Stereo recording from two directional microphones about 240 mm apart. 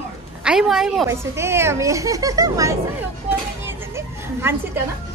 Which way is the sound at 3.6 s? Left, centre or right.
Centre.